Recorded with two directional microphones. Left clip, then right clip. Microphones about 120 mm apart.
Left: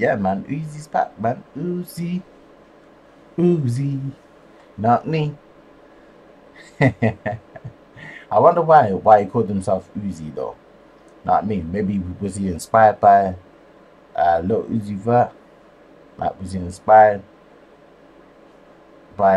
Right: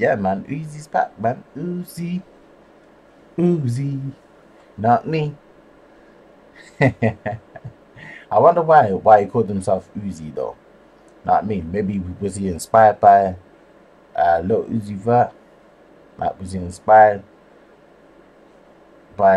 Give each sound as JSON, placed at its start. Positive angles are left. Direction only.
{"t": 0.0, "sound": "speech", "side_deg": -15}
{"t": 3.3, "sound": "speech", "side_deg": -10}
{"t": 6.6, "sound": "speech", "side_deg": -10}
{"t": 19.2, "sound": "speech", "side_deg": -10}